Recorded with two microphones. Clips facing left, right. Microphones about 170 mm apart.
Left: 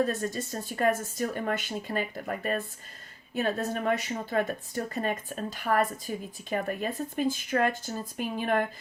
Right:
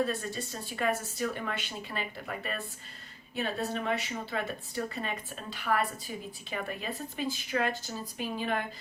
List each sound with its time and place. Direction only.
0.0 s a woman's voice: 45° left (ahead or behind)